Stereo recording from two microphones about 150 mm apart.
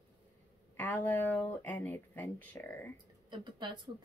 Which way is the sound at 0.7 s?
10° left (ahead or behind).